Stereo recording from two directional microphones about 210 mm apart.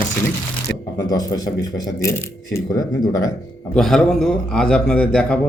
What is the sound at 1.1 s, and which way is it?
Speech, 15° left (ahead or behind).